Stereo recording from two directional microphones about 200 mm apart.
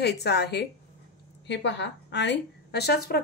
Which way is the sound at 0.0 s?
55° left (ahead or behind).